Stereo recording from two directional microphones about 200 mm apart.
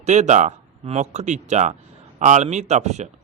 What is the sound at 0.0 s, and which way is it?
A man's voice, 35° right (ahead or behind).